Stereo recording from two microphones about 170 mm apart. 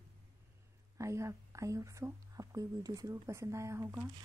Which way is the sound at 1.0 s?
15° right (ahead or behind).